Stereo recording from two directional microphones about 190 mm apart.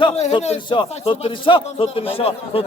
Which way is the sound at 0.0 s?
30° left (ahead or behind).